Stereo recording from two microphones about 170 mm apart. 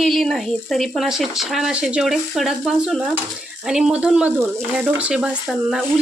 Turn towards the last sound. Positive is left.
turn(degrees=-5)  # may be behind; listen again after turning